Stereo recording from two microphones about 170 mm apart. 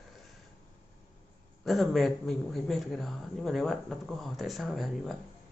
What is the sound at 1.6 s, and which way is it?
A man's voice, centre (ahead or behind).